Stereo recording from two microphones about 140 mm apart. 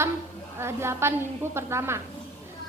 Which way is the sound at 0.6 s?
20° right (ahead or behind).